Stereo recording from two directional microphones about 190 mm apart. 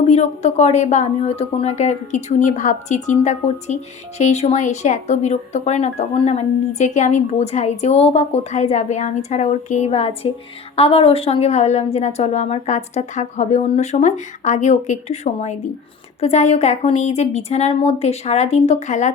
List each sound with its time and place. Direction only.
0.1 s speech: 35° left (ahead or behind)